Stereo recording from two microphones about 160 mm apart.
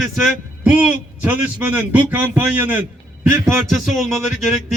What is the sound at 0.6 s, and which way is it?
A man's voice, 10° right (ahead or behind).